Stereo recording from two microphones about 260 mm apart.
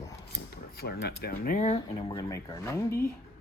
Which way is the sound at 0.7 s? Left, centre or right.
Left.